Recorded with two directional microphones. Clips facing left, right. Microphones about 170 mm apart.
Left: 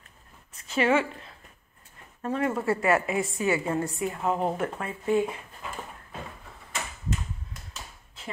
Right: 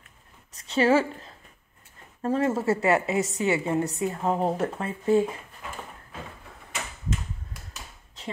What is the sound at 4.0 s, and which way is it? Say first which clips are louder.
Speech: right 2 dB; 30° right (ahead or behind).